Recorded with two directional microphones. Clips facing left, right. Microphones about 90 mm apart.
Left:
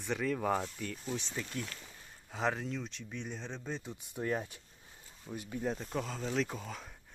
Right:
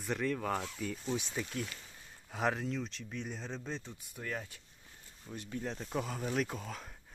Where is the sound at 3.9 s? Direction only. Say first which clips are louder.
Left 6 dB; 20° left (ahead or behind).